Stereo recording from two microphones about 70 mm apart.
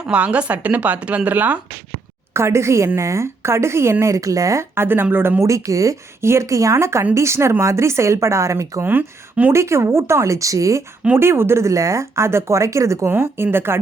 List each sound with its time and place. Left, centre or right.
0.1 s speech: centre
2.3 s a woman's voice: right
4.0 s speech: right
4.7 s a woman's voice: right
5.4 s a woman's voice: right
8.8 s speech: right
9.5 s speech: right
11.2 s speech: right
13.1 s a woman's voice: right